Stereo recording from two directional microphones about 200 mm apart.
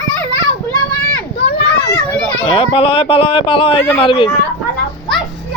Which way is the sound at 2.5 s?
30° left (ahead or behind).